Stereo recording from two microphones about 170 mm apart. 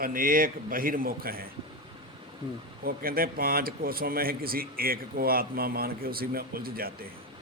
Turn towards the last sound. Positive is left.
turn(degrees=-60)  # may be behind; listen again after turning